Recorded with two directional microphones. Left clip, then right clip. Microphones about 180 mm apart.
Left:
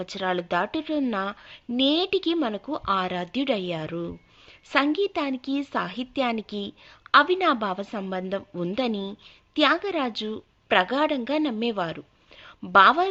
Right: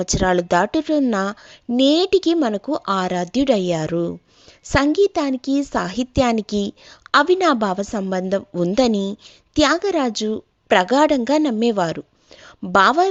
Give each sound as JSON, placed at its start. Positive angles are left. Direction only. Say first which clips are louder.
{"t": 0.0, "sound": "a woman's voice", "louder": "right 9 dB", "side_deg": -50}